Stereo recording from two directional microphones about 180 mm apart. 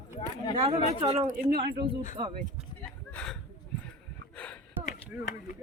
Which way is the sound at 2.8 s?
5° left (ahead or behind).